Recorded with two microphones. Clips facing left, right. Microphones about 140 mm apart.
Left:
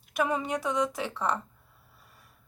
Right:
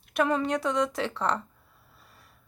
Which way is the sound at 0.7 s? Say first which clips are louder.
Right 2 dB; 70° right (ahead or behind).